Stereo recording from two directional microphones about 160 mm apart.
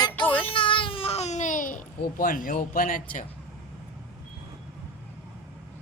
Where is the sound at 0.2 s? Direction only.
10° left (ahead or behind).